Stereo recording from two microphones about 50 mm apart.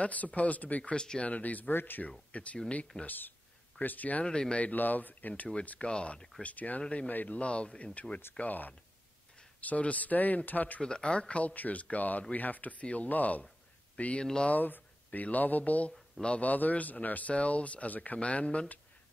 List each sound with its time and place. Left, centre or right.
0.0 s speech: left
0.9 s speech: centre
1.3 s speech: left
2.3 s speech: left
3.1 s speech: left
4.3 s speech: centre
6.4 s speech: left
10.8 s speech: centre
14.2 s speech: centre
14.5 s speech: left
16.4 s speech: left